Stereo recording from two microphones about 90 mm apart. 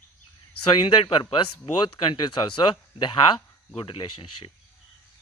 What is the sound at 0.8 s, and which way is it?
Speech, 80° left.